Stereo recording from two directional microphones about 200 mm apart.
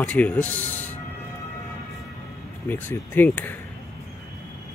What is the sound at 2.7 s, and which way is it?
Speech, 10° left (ahead or behind).